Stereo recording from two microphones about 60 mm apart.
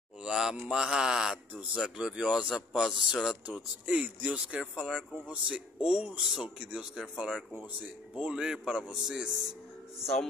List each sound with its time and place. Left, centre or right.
0.2 s mantra: centre
0.7 s speech: centre
1.5 s speech: right
1.8 s speech: centre
3.4 s speech: right